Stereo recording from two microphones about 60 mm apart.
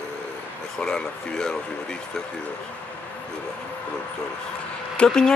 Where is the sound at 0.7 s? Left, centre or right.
Centre.